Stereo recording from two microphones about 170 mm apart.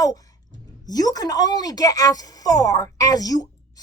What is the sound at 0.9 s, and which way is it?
Speech, 20° left (ahead or behind).